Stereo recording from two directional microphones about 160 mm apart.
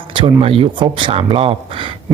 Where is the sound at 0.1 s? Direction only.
35° right (ahead or behind).